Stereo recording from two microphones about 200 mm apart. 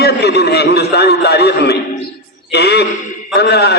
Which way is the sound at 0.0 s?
55° left (ahead or behind).